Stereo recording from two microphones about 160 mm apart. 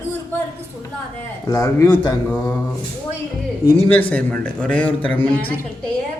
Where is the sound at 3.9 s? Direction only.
10° left (ahead or behind).